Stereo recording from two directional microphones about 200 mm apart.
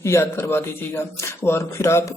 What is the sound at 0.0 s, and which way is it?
A man's voice, 15° left (ahead or behind).